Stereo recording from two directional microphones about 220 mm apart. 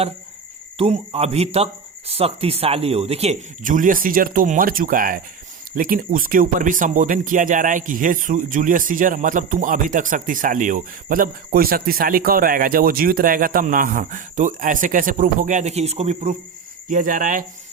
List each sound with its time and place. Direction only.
0.8 s speech: 30° right (ahead or behind)